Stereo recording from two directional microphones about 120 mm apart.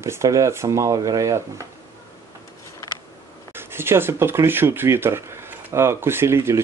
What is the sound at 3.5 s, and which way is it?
Speech, 20° right (ahead or behind).